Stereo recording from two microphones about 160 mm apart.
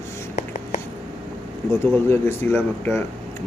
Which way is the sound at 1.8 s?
15° left (ahead or behind).